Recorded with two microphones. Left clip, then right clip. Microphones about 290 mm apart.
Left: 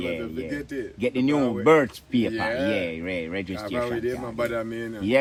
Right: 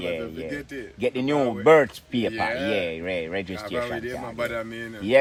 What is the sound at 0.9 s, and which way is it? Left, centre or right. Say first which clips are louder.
Speech: right 1 dB; right.